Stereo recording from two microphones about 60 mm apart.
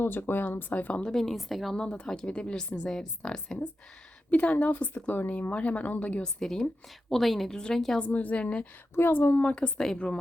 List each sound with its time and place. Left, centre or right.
0.0 s speech: left
1.0 s a woman's voice: centre
1.7 s speech: centre
4.3 s speech: left
6.4 s speech: centre
8.0 s speech: left
9.0 s speech: left
9.6 s speech: centre